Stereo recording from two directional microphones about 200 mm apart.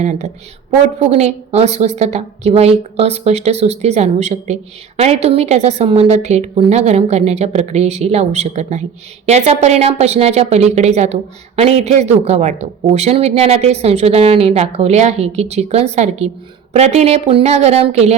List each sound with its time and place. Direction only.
0.0 s a woman's voice: 35° right (ahead or behind)